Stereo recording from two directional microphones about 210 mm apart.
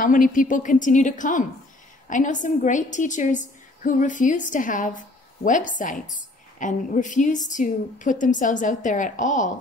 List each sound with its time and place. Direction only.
0.0 s a woman's voice: 40° left (ahead or behind)